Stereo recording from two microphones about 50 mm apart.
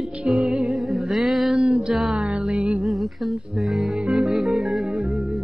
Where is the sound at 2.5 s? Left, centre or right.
Right.